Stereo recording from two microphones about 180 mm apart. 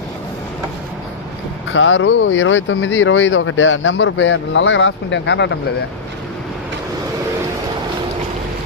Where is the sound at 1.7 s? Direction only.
90° left.